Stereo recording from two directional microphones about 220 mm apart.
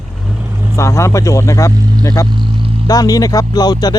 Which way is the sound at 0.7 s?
15° left (ahead or behind).